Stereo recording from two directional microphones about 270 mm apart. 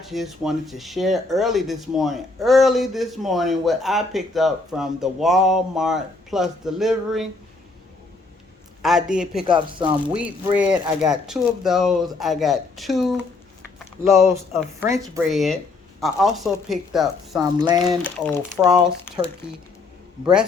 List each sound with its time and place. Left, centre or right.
0.0 s speech: centre
8.8 s speech: centre
9.4 s speech: centre
10.2 s speech: centre
13.7 s a sound: centre
14.5 s speech: centre